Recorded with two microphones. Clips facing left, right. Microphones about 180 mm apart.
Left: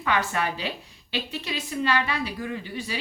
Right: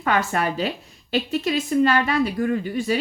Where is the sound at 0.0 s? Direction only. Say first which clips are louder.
Right 4 dB; 45° right (ahead or behind).